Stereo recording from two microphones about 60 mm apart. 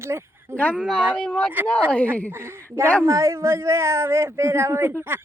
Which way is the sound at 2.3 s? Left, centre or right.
Right.